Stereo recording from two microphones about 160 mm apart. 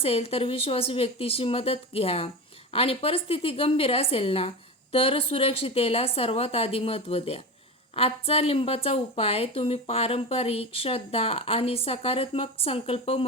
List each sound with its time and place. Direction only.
0.0 s speech: 35° left (ahead or behind)